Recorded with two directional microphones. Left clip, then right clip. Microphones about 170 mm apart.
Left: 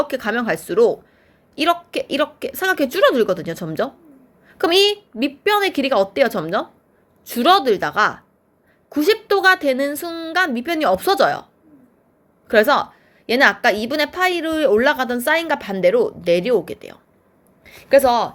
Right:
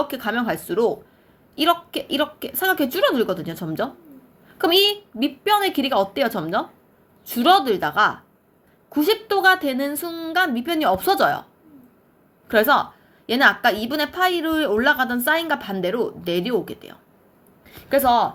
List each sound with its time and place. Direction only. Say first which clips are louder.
0.0 s a woman's voice: left 3 dB; 40° left (ahead or behind)
12.5 s a woman's voice: left 2 dB; 40° left (ahead or behind)